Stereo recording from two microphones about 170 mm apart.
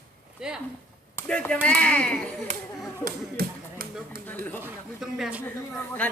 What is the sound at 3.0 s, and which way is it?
Speech, 60° right (ahead or behind).